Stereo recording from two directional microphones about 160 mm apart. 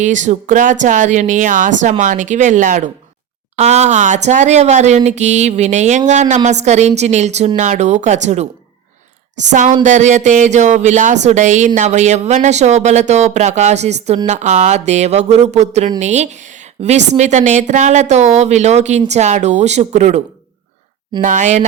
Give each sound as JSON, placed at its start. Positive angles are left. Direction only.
{"t": 0.0, "sound": "speech", "side_deg": -50}
{"t": 9.5, "sound": "speech", "side_deg": -50}